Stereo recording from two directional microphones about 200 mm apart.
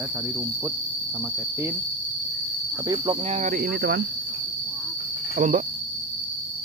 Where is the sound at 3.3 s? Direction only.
40° right (ahead or behind).